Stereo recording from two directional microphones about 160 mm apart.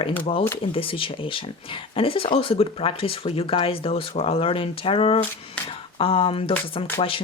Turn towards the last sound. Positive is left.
turn(degrees=35)  # may be behind; listen again after turning